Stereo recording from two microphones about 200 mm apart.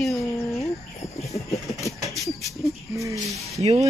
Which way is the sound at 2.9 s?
15° right (ahead or behind).